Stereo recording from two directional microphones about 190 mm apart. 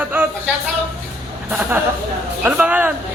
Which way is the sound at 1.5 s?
10° right (ahead or behind).